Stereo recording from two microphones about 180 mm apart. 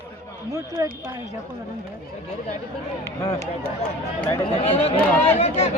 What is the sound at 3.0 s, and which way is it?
Speech, 15° left (ahead or behind).